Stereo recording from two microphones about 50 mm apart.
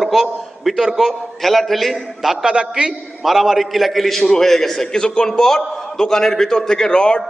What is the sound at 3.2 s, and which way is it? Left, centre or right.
A man's voice, centre.